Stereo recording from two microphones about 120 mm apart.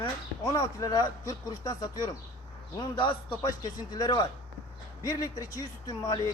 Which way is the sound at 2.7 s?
45° left (ahead or behind).